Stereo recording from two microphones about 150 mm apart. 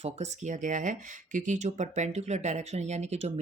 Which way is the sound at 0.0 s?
50° right (ahead or behind).